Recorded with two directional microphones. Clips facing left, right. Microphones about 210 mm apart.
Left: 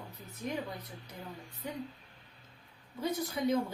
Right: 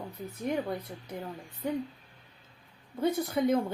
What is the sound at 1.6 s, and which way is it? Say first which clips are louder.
Speech: right 9 dB; 55° right (ahead or behind).